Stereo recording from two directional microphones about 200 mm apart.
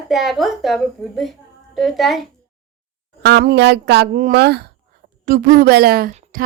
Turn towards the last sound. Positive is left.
turn(degrees=-45)  # may be behind; listen again after turning